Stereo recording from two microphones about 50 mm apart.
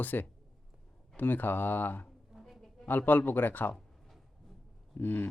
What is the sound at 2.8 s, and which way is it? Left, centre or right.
Speech, left.